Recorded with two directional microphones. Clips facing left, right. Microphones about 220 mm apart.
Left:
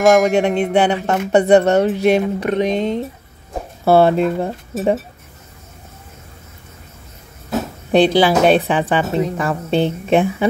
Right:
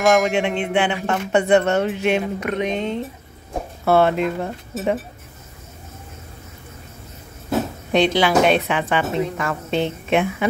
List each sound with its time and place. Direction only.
0.3 s speech: 40° left (ahead or behind)
7.9 s speech: 35° left (ahead or behind)